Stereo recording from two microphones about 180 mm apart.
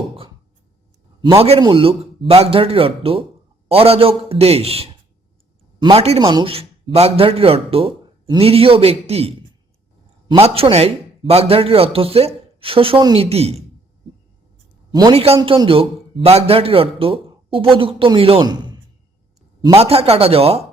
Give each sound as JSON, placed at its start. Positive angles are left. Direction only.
{"t": 1.4, "sound": "speech", "side_deg": -30}
{"t": 14.9, "sound": "speech", "side_deg": -30}